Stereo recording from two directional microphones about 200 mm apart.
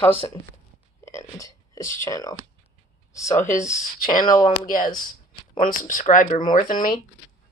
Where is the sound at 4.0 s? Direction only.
45° left (ahead or behind).